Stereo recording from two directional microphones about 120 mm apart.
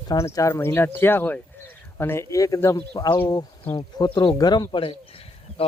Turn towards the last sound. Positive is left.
turn(degrees=55)  # may be behind; listen again after turning